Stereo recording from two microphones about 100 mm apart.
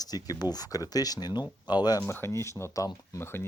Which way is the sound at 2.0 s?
25° left (ahead or behind).